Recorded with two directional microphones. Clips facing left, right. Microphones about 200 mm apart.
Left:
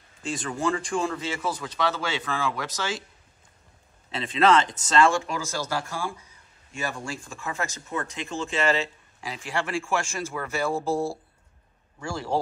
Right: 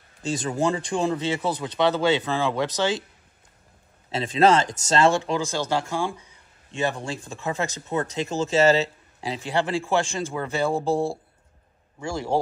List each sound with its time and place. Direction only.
0.2 s a man's voice: 35° right (ahead or behind)
4.1 s a man's voice: 40° right (ahead or behind)
12.0 s a man's voice: 15° right (ahead or behind)